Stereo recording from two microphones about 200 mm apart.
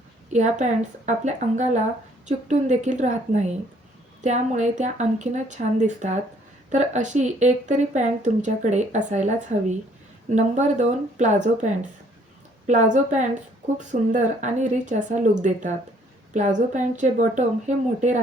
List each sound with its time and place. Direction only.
0.3 s speech: 35° right (ahead or behind)